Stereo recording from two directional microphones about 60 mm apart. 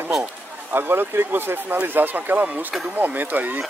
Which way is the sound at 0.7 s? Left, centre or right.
Right.